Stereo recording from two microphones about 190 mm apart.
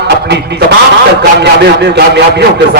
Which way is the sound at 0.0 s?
60° right (ahead or behind).